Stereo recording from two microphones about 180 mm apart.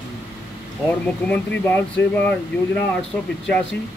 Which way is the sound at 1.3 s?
10° left (ahead or behind).